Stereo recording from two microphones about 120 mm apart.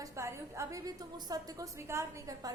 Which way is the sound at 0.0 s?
25° right (ahead or behind).